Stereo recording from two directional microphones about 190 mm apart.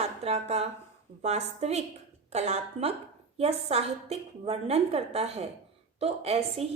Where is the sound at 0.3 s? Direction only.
35° right (ahead or behind).